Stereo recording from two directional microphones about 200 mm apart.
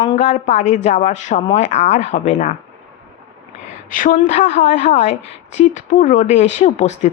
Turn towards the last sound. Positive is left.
turn(degrees=35)  # may be behind; listen again after turning